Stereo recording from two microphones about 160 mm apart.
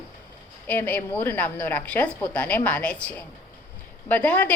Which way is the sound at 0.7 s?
10° left (ahead or behind).